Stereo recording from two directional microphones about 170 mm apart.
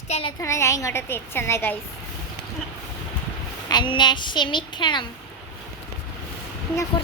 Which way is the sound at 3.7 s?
25° left (ahead or behind).